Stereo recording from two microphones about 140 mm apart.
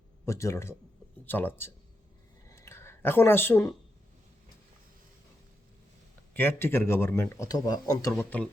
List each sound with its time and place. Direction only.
0.3 s speech: 20° left (ahead or behind)
2.5 s a sound: 20° left (ahead or behind)
6.3 s speech: 15° left (ahead or behind)